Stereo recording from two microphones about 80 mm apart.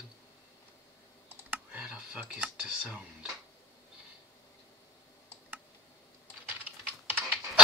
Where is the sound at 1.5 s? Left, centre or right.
Centre.